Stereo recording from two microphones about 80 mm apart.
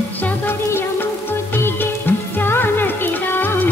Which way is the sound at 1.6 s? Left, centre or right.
Left.